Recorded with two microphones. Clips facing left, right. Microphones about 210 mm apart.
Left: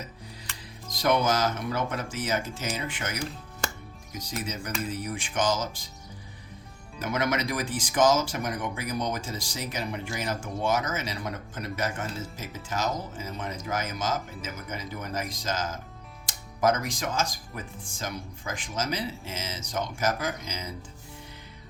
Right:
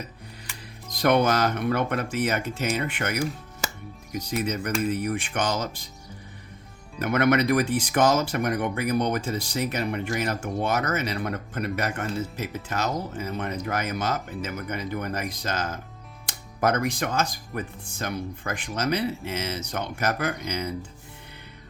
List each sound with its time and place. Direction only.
0.9 s speech: 60° right (ahead or behind)
4.3 s speech: 60° right (ahead or behind)
7.0 s speech: 60° right (ahead or behind)